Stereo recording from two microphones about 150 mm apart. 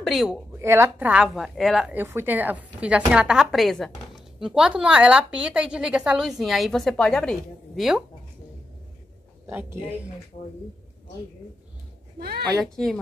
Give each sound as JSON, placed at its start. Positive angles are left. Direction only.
{"t": 0.0, "sound": "a woman's voice", "side_deg": 0}
{"t": 0.5, "sound": "a woman's voice", "side_deg": -15}
{"t": 9.5, "sound": "speech", "side_deg": -10}
{"t": 12.2, "sound": "speech", "side_deg": -90}
{"t": 12.7, "sound": "a woman's voice", "side_deg": 5}